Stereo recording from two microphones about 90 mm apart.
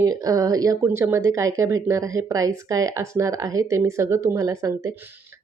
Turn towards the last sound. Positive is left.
turn(degrees=-35)  # may be behind; listen again after turning